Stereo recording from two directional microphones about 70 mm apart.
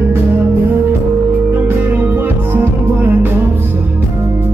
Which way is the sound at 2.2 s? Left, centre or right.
Right.